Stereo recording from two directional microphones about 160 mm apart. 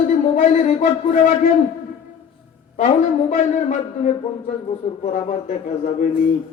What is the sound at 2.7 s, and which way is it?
Speech, 50° left (ahead or behind).